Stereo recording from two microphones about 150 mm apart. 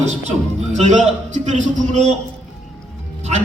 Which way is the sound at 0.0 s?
50° right (ahead or behind).